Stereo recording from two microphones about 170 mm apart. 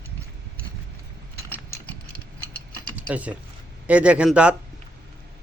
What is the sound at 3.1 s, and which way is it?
Speech, 10° right (ahead or behind).